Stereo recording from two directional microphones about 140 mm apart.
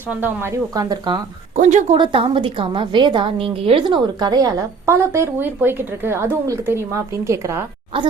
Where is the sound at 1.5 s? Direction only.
60° right (ahead or behind).